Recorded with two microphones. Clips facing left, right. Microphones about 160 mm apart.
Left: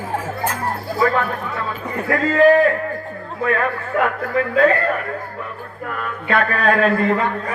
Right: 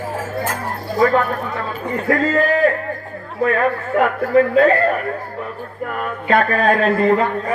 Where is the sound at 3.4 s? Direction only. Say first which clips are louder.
Right 3 dB; 35° right (ahead or behind).